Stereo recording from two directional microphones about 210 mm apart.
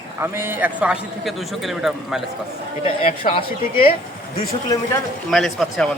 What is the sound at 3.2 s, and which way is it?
Speech, 25° left (ahead or behind).